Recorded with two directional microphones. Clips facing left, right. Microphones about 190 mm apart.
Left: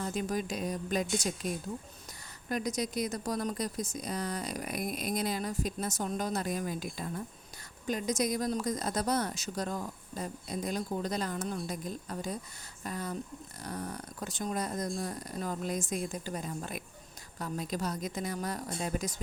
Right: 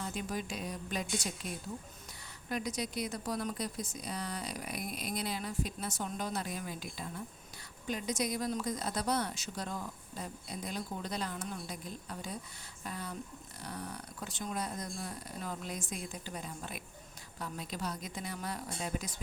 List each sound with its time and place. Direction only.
0.0 s speech: 45° left (ahead or behind)
2.5 s speech: 40° left (ahead or behind)